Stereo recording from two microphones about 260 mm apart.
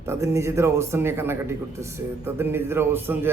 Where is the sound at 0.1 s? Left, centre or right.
Centre.